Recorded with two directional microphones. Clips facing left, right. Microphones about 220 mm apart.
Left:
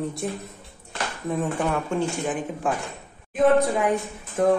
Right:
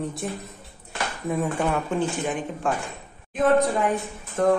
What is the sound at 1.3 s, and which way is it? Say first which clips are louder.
A woman's voice: even; 10° right (ahead or behind).